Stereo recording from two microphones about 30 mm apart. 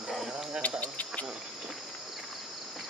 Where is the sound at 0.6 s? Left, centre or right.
Left.